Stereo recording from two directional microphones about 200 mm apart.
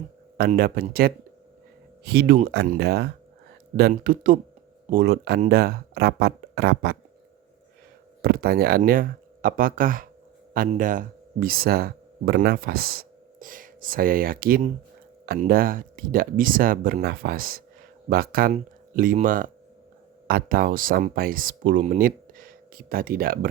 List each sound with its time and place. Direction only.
0.3 s speech: 50° right (ahead or behind)
8.2 s speech: 50° right (ahead or behind)